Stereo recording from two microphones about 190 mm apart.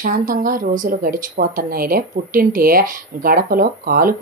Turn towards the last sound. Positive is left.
turn(degrees=-50)  # may be behind; listen again after turning